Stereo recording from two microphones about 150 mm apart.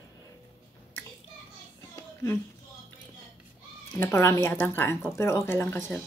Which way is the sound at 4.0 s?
20° left (ahead or behind).